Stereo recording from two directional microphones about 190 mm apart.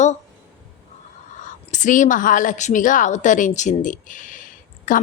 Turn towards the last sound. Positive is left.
turn(degrees=45)  # may be behind; listen again after turning